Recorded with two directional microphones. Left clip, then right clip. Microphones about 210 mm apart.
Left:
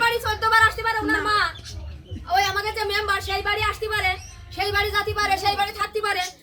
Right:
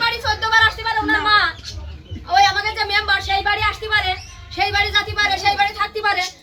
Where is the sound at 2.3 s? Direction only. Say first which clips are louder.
Right 6 dB; 15° left (ahead or behind).